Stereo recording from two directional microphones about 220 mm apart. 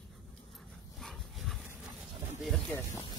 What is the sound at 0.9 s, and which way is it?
Dog, centre (ahead or behind).